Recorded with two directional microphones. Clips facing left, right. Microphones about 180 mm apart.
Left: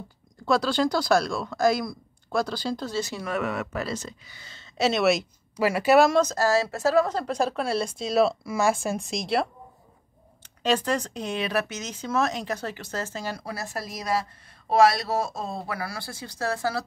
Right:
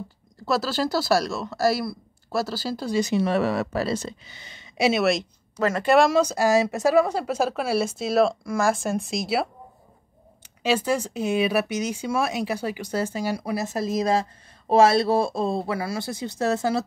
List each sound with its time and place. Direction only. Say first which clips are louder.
0.5 s speech: left 1 dB; 5° right (ahead or behind); by 4.4 s 30° right (ahead or behind)
4.4 s speech: right 2 dB; 15° right (ahead or behind)
5.0 s speech: even; 5° left (ahead or behind)
6.1 s speech: right 2 dB; 10° right (ahead or behind)
10.6 s speech: right 2 dB; 5° right (ahead or behind)